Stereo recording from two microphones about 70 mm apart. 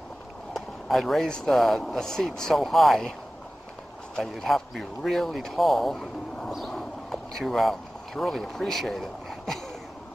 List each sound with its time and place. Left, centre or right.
0.5 s speech: centre
4.1 s speech: centre
6.5 s a sound: centre